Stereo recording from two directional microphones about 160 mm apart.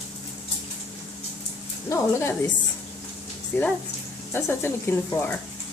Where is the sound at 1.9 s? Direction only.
15° left (ahead or behind).